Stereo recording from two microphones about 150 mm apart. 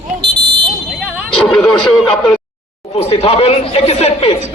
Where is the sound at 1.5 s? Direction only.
5° left (ahead or behind).